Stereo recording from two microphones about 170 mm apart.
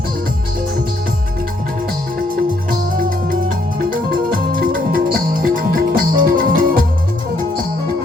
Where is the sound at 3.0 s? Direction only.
55° right (ahead or behind).